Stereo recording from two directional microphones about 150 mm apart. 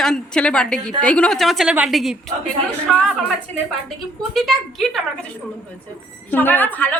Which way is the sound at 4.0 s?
Centre (ahead or behind).